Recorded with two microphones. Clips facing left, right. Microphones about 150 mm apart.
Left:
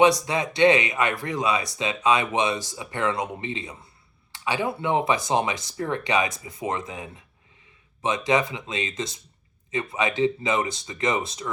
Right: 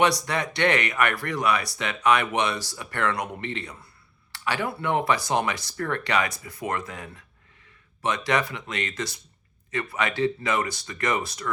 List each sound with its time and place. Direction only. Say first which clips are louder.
0.5 s speech: left 6 dB; 15° left (ahead or behind)
8.3 s speech: left 4 dB; 20° left (ahead or behind)